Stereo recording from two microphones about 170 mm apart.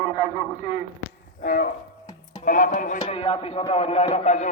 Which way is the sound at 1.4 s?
50° left (ahead or behind).